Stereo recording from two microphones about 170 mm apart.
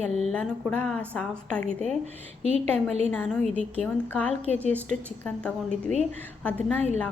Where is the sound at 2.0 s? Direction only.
40° right (ahead or behind).